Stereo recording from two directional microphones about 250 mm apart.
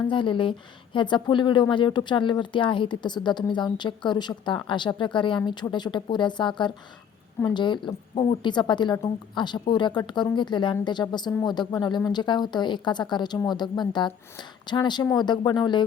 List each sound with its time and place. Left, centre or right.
0.1 s a woman's voice: centre